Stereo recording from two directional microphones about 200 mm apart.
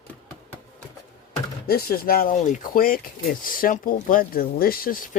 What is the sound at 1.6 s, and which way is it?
Speech, 50° left (ahead or behind).